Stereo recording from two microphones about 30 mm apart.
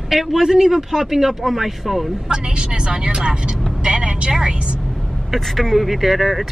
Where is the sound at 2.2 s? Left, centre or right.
Right.